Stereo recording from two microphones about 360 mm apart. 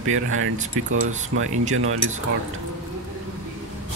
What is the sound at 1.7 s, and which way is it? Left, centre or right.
Speech, right.